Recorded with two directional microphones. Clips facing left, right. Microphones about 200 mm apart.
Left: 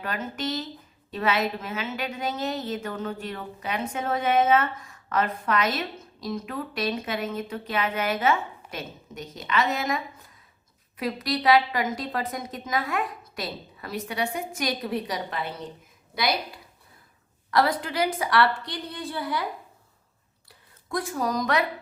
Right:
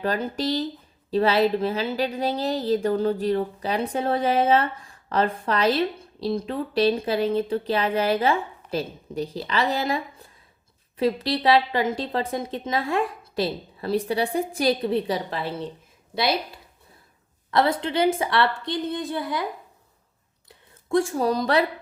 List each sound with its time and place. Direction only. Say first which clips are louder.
0.0 s a woman's voice: right 6 dB; 35° right (ahead or behind)
17.5 s a woman's voice: right 2 dB; 25° right (ahead or behind)
20.5 s speech: right 9 dB; 30° right (ahead or behind)